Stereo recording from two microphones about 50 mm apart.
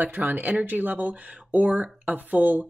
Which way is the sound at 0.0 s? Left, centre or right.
Right.